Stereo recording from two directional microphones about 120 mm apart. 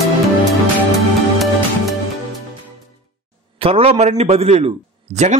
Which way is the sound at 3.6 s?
55° right (ahead or behind).